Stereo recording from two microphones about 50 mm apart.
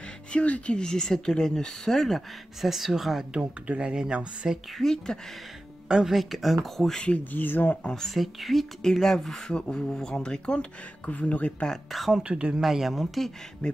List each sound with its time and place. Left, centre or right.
0.3 s speech: left; by 3.3 s centre
3.3 s speech: right
3.9 s speech: centre
4.7 s speech: centre
5.9 s speech: centre
6.1 s speech: centre
7.3 s speech: left
7.8 s speech: centre
8.1 s speech: centre
9.5 s speech: centre
11.9 s speech: centre
12.2 s speech: right
12.5 s speech: centre